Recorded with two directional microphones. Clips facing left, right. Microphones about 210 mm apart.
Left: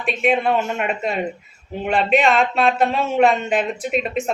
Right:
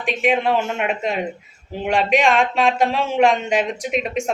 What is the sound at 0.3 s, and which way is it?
Speech, 5° right (ahead or behind).